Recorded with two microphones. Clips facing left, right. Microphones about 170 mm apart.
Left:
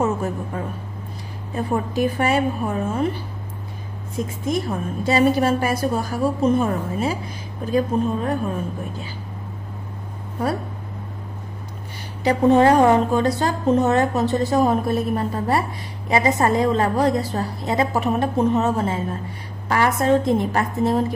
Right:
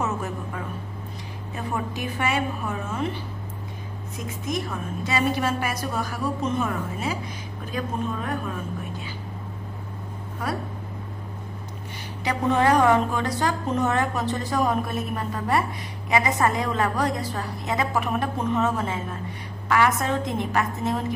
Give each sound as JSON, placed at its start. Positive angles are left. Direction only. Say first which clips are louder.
{"t": 0.0, "sound": "a sound", "louder": "left 6 dB", "side_deg": 30}
{"t": 2.0, "sound": "a woman's voice", "louder": "left 8 dB", "side_deg": 35}
{"t": 4.5, "sound": "a woman's voice", "louder": "left 5 dB", "side_deg": 30}
{"t": 12.2, "sound": "a woman's voice", "louder": "left 7 dB", "side_deg": 35}